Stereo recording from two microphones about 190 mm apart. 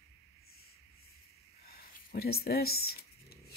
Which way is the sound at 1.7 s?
55° left (ahead or behind).